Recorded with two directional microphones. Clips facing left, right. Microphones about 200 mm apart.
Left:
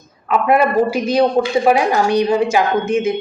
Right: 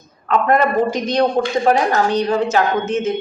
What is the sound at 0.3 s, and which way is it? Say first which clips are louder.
A man's voice: left 1 dB; 10° left (ahead or behind).